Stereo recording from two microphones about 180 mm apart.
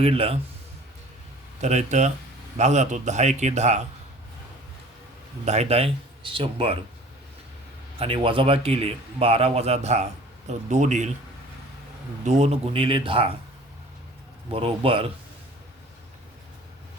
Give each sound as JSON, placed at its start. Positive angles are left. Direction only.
{"t": 0.0, "sound": "a man's voice", "side_deg": -30}
{"t": 1.6, "sound": "a man's voice", "side_deg": -40}
{"t": 5.5, "sound": "a man's voice", "side_deg": -35}
{"t": 7.9, "sound": "a man's voice", "side_deg": -30}
{"t": 12.2, "sound": "a man's voice", "side_deg": -40}
{"t": 14.5, "sound": "a man's voice", "side_deg": -30}